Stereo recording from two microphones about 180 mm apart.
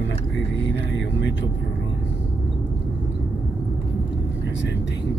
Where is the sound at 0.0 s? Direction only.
85° left.